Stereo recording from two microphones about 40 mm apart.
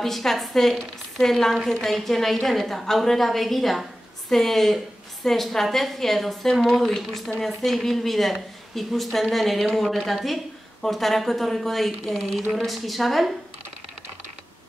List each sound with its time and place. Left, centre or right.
0.0 s a woman's voice: centre